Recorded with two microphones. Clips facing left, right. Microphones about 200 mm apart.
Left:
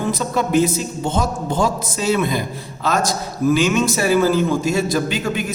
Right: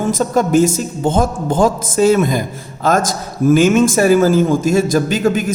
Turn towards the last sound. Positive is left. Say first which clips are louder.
# right 6 dB
turn(degrees=-45)  # may be behind; listen again after turning